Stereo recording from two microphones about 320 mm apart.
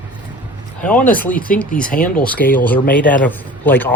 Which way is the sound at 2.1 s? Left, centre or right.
Centre.